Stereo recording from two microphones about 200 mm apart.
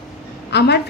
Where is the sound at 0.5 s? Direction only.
55° left (ahead or behind).